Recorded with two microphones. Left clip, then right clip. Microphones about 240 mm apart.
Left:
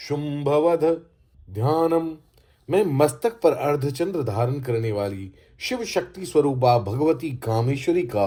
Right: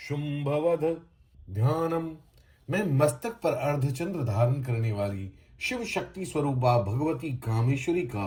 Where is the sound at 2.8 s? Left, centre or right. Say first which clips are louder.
Left 6 dB; left.